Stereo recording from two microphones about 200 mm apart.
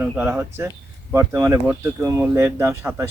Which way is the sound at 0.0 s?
10° right (ahead or behind).